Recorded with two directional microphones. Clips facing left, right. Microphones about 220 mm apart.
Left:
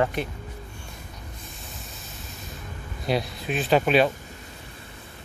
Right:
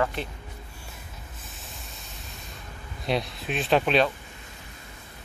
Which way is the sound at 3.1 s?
Centre (ahead or behind).